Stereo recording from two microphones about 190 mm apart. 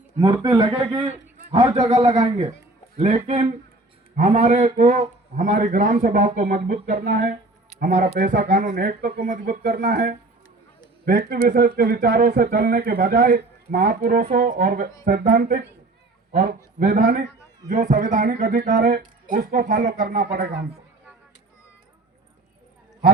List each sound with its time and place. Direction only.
0.4 s a man's voice: 25° right (ahead or behind)
3.0 s speech: 35° right (ahead or behind); by 20.7 s 60° right (ahead or behind)